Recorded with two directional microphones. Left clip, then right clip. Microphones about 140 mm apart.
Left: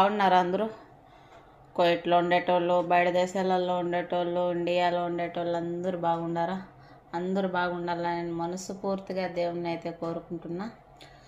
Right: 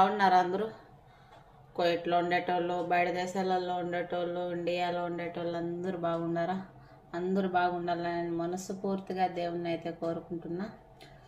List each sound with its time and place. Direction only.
0.0 s a woman's voice: 30° left (ahead or behind)
1.8 s speech: 30° left (ahead or behind)